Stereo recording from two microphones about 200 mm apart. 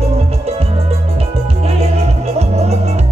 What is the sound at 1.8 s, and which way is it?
Music, 30° right (ahead or behind).